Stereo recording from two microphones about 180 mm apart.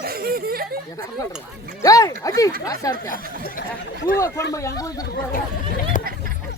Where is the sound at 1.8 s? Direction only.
20° left (ahead or behind).